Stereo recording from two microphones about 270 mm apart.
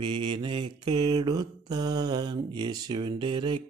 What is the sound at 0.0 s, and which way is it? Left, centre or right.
Mantra, centre.